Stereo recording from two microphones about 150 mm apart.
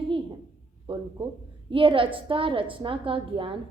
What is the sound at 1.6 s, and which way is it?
A woman's voice, 35° right (ahead or behind).